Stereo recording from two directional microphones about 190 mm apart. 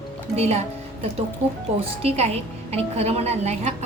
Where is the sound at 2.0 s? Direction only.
35° right (ahead or behind).